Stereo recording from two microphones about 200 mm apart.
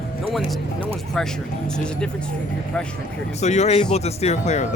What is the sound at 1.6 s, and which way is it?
Speech, 5° left (ahead or behind).